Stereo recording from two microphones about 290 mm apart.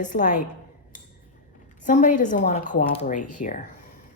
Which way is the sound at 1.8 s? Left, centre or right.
Left.